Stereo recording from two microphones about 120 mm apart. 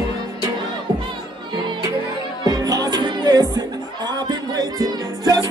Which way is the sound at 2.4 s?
30° right (ahead or behind).